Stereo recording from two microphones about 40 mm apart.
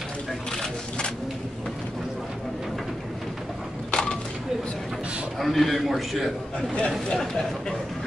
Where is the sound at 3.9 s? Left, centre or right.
Left.